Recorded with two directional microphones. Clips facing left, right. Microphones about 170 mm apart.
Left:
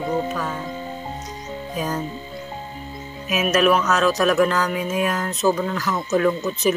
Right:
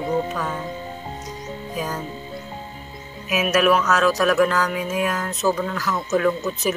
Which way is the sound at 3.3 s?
5° right (ahead or behind).